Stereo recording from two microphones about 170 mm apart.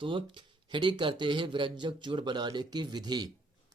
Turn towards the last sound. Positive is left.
turn(degrees=-25)  # may be behind; listen again after turning